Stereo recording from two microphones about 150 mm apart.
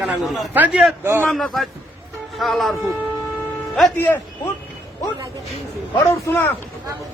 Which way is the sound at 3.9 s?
15° left (ahead or behind).